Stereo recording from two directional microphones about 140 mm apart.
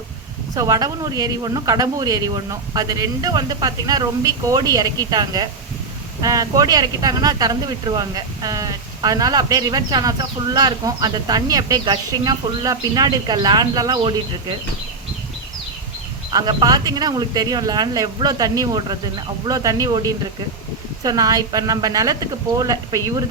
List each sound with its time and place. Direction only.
0.5 s speech: 25° right (ahead or behind)
16.3 s speech: 30° right (ahead or behind)